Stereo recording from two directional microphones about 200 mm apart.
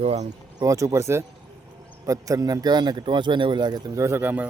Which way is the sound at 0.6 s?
15° right (ahead or behind).